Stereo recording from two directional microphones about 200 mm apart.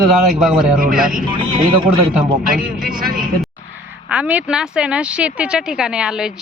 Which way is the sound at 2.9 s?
45° right (ahead or behind).